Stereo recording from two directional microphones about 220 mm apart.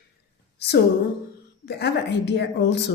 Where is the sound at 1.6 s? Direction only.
50° left (ahead or behind).